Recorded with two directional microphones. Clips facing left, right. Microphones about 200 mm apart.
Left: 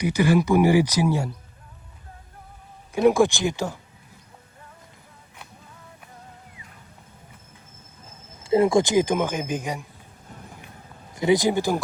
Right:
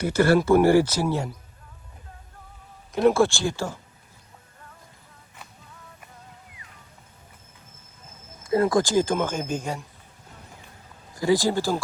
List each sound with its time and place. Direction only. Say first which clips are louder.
0.0 s speech: right 1 dB; 15° left (ahead or behind)
2.9 s speech: left 1 dB; 15° left (ahead or behind)
8.4 s speech: left 3 dB; 25° left (ahead or behind)
11.1 s speech: left 2 dB; 20° left (ahead or behind)